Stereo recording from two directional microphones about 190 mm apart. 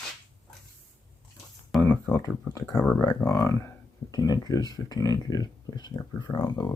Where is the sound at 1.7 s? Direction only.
10° left (ahead or behind).